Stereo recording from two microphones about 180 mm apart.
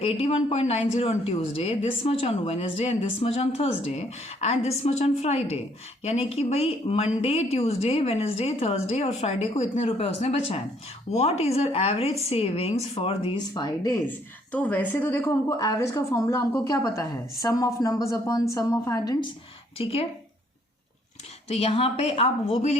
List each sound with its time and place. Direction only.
0.0 s speech: 30° left (ahead or behind)
19.8 s speech: 35° left (ahead or behind)
21.5 s speech: 35° left (ahead or behind)